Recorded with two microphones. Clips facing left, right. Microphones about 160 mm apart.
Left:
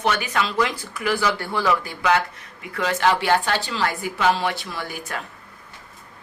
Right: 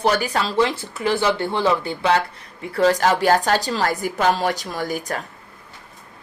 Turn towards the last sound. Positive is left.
turn(degrees=-40)  # may be behind; listen again after turning